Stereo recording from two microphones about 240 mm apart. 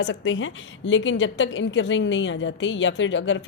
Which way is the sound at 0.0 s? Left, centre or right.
Left.